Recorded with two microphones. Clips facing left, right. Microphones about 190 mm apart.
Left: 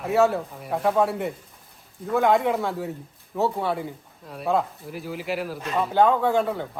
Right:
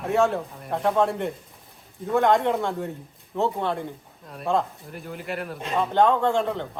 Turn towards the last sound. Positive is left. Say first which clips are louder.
# left 1 dB
turn(degrees=5)  # may be behind; listen again after turning